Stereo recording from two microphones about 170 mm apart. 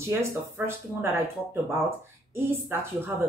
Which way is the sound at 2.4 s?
15° right (ahead or behind).